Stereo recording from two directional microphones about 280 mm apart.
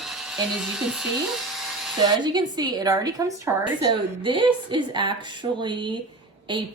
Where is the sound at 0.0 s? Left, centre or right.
Centre.